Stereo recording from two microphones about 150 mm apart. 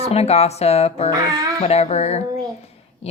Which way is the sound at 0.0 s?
40° left (ahead or behind).